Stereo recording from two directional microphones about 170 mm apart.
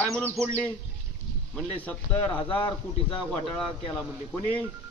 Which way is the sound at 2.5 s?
30° left (ahead or behind).